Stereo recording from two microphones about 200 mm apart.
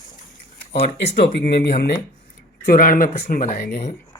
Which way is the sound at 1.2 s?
60° left (ahead or behind).